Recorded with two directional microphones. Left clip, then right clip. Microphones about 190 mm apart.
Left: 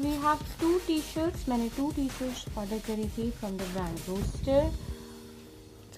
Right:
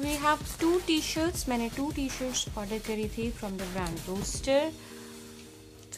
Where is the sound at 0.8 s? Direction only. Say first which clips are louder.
Right 2 dB; 25° right (ahead or behind).